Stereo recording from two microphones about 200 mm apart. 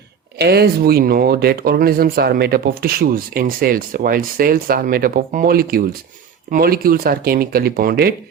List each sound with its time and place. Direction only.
0.3 s speech: 55° right (ahead or behind)